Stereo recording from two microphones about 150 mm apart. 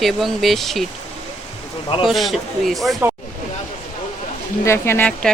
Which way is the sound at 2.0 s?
Centre (ahead or behind).